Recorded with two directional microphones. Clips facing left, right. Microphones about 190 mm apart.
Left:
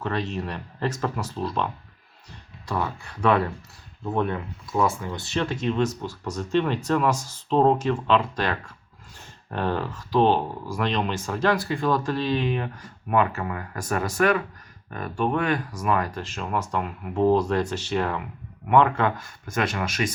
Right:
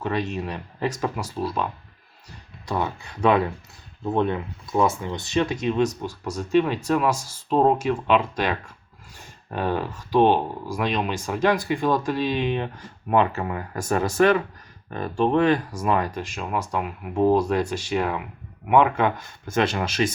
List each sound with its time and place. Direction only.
0.0 s speech: 15° right (ahead or behind)
2.6 s speech: 20° right (ahead or behind)